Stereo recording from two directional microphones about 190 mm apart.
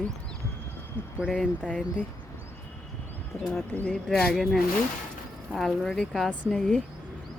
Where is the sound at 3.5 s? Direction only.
5° left (ahead or behind).